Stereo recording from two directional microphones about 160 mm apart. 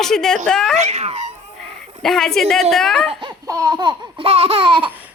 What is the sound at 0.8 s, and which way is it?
Speech, 45° right (ahead or behind).